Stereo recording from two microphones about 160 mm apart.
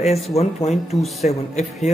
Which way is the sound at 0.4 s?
45° left (ahead or behind).